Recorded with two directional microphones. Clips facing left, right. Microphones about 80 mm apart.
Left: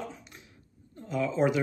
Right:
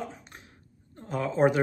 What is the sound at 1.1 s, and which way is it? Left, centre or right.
Speech, right.